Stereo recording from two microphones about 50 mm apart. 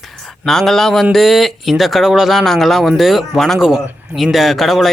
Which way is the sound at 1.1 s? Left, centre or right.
Centre.